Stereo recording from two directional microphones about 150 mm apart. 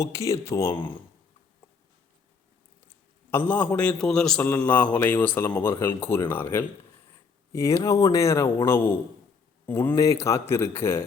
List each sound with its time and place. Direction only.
0.0 s speech: 20° left (ahead or behind)
3.3 s a man's voice: 10° left (ahead or behind)